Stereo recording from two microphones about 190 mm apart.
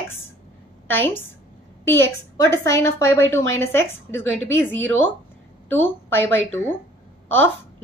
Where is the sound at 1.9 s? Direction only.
85° right.